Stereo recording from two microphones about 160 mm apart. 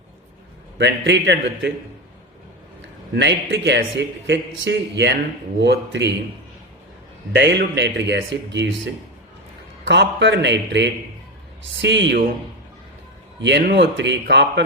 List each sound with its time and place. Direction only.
0.8 s a man's voice: 90° right
3.2 s a man's voice: 90° right
7.3 s a man's voice: 90° right
9.8 s a man's voice: 90° right
13.4 s a man's voice: 90° right